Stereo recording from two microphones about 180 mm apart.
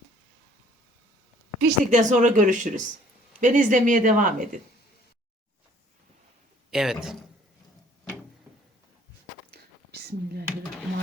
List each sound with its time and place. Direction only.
1.6 s speech: 45° right (ahead or behind)
6.7 s a man's voice: centre (ahead or behind)
9.5 s whispering: 60° right (ahead or behind)